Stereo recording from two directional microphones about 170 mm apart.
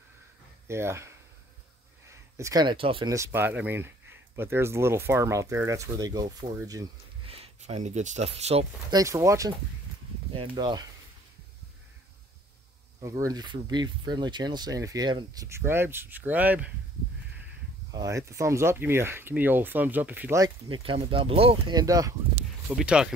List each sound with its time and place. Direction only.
0.7 s speech: 15° right (ahead or behind); by 3.1 s 30° right (ahead or behind)
3.1 s speech: 15° right (ahead or behind)
7.2 s speech: 35° right (ahead or behind)
8.9 s speech: 20° right (ahead or behind)
13.0 s speech: 20° right (ahead or behind)
17.9 s speech: 20° right (ahead or behind)
22.7 s speech: 5° right (ahead or behind)